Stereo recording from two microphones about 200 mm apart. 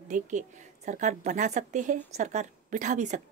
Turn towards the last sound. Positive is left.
turn(degrees=-35)  # may be behind; listen again after turning